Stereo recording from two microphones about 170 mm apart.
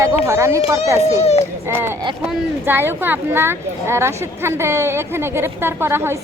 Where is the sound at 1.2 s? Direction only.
40° left (ahead or behind).